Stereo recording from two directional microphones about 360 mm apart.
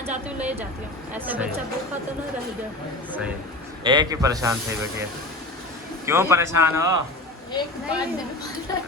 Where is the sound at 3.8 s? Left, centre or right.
Centre.